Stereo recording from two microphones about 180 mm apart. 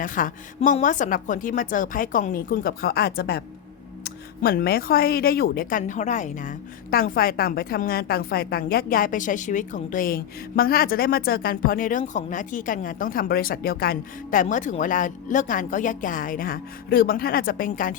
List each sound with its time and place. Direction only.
0.0 s speech: 50° left (ahead or behind)